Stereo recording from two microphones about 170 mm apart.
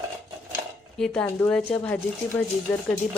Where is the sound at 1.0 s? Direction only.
5° left (ahead or behind).